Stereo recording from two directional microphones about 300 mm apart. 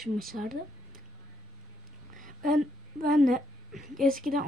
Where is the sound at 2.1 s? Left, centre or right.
Right.